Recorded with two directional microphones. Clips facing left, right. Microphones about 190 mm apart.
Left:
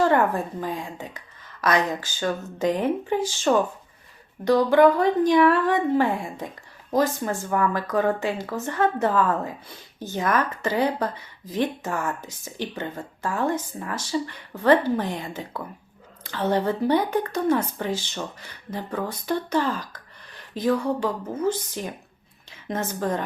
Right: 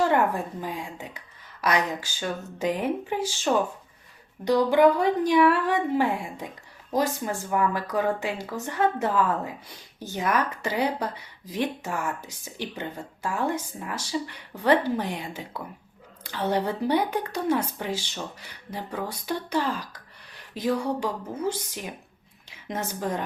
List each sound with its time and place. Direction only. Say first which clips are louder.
0.6 s speech: left 3 dB; 10° right (ahead or behind)
4.4 s speech: left 2 dB; 15° right (ahead or behind)